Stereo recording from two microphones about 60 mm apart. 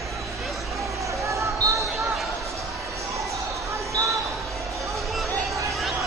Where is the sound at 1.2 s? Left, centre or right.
Right.